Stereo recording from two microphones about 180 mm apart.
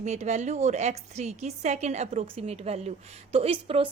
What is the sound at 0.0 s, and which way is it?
A woman's voice, 40° right (ahead or behind).